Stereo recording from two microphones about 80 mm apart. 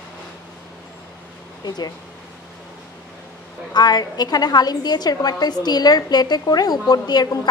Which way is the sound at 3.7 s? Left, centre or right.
Left.